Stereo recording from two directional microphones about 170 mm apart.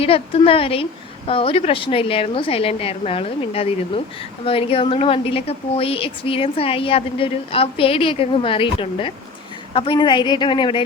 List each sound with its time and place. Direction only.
0.0 s a woman's voice: 35° left (ahead or behind)